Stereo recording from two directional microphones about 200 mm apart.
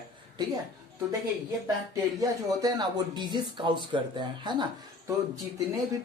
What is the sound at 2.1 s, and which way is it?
Speech, 20° right (ahead or behind).